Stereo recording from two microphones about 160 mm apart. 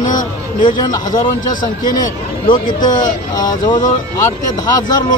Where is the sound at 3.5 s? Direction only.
25° left (ahead or behind).